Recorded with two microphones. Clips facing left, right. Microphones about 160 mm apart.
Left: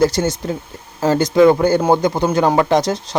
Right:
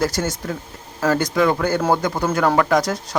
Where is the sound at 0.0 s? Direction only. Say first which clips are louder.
Left 6 dB; 25° left (ahead or behind).